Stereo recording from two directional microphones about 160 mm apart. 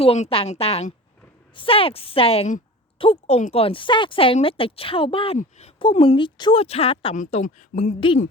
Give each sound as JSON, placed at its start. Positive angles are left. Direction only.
{"t": 0.0, "sound": "speech", "side_deg": 35}
{"t": 7.2, "sound": "speech", "side_deg": 45}